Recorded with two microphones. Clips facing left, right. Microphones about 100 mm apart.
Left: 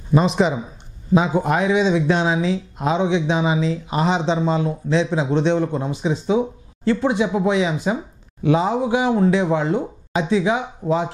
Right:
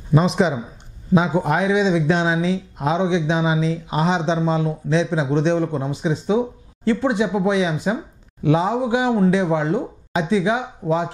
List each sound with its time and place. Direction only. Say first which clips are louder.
0.1 s speech: even; 15° left (ahead or behind)